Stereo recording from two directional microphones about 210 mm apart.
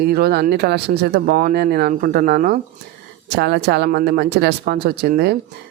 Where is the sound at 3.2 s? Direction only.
55° right (ahead or behind).